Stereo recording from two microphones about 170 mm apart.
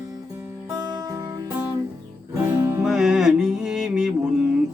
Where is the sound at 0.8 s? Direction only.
25° right (ahead or behind).